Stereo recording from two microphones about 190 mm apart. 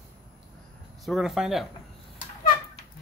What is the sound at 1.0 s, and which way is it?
Speech, centre (ahead or behind).